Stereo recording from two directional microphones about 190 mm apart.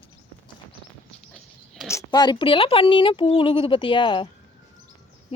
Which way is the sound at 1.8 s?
20° left (ahead or behind).